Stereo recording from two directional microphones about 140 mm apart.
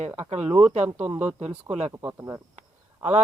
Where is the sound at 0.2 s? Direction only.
50° right (ahead or behind).